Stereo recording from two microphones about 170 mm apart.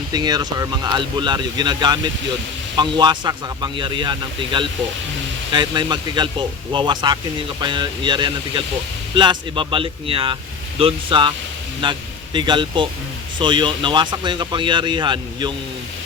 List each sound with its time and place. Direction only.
0.1 s speech: 25° right (ahead or behind)